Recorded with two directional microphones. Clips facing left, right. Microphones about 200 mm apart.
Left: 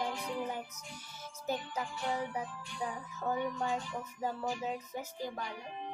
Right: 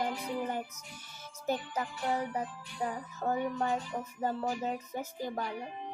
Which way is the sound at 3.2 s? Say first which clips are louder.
Right 3 dB; 50° right (ahead or behind).